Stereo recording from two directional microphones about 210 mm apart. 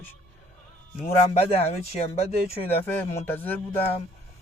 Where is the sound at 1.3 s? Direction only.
30° left (ahead or behind).